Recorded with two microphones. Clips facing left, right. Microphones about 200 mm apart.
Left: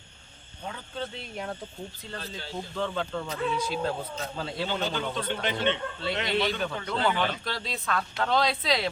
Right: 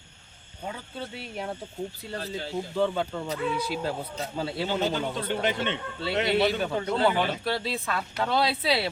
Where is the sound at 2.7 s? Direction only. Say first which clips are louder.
Right 4 dB; 10° right (ahead or behind).